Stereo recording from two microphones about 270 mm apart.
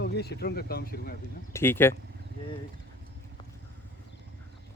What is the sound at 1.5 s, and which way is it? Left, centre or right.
Speech, centre.